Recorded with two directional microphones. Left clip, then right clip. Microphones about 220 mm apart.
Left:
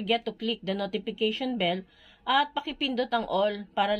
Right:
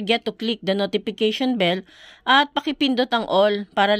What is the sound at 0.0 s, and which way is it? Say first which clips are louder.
A woman's voice: right 6 dB; 50° right (ahead or behind).